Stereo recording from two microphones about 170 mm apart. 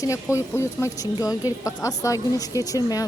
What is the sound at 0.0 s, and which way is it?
Speech, 15° left (ahead or behind).